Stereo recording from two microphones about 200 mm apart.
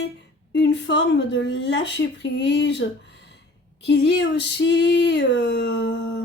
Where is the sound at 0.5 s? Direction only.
60° left (ahead or behind).